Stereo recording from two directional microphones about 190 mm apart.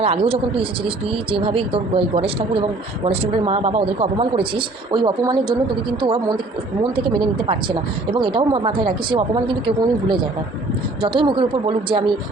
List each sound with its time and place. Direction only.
0.0 s speech: 30° right (ahead or behind)